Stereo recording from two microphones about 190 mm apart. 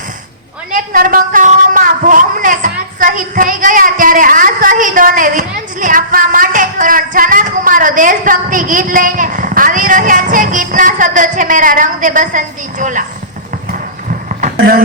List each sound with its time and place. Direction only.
0.7 s speech: 45° right (ahead or behind)